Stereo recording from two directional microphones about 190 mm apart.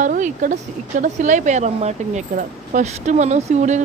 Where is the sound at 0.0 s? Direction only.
45° right (ahead or behind).